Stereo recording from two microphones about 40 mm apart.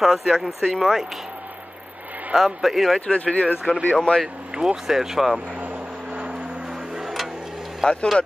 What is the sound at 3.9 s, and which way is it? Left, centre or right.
Speech, left.